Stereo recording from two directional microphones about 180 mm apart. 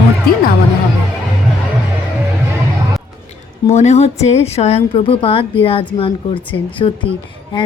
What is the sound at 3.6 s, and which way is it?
A woman's voice, 40° left (ahead or behind).